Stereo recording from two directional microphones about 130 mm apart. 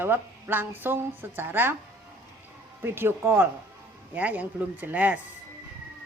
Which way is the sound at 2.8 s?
15° right (ahead or behind).